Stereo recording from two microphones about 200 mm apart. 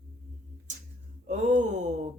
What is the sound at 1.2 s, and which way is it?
Speech, 35° right (ahead or behind).